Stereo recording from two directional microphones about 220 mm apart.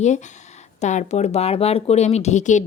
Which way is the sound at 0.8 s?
30° left (ahead or behind).